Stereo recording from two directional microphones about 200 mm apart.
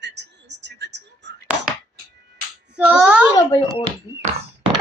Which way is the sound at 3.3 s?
20° left (ahead or behind).